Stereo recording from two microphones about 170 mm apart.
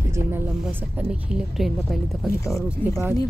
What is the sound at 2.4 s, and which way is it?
Speech, 15° left (ahead or behind).